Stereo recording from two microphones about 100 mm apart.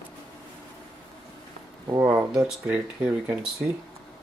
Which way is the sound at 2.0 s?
20° right (ahead or behind).